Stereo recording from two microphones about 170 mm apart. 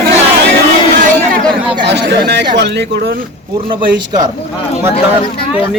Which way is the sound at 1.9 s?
85° right.